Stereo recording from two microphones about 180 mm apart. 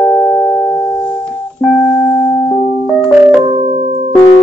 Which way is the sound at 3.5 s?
35° right (ahead or behind).